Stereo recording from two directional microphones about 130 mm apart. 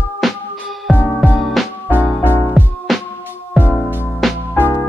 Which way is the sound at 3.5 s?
15° right (ahead or behind).